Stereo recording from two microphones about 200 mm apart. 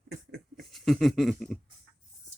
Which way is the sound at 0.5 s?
Centre (ahead or behind).